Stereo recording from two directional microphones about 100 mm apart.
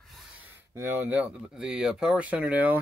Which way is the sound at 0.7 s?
25° right (ahead or behind).